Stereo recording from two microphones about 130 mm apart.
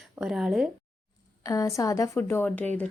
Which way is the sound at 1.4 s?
25° left (ahead or behind).